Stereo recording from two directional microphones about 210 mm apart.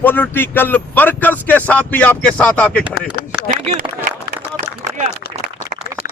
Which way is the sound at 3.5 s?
40° right (ahead or behind).